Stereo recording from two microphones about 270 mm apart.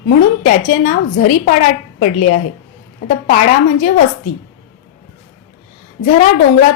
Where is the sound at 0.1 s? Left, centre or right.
Left.